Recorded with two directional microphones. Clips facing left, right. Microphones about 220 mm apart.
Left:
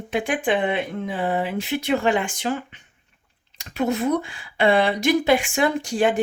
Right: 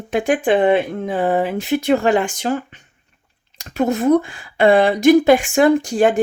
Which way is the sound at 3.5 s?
45° right (ahead or behind).